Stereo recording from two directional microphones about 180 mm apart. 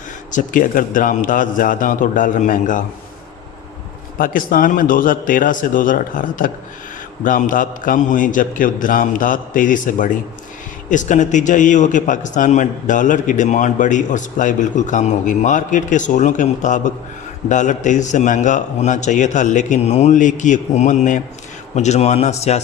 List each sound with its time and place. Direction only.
0.3 s a man's voice: 45° left (ahead or behind)
4.2 s a man's voice: 50° left (ahead or behind)